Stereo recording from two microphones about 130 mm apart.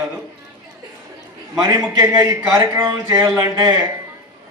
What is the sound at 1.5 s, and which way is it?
A man's voice, 25° right (ahead or behind).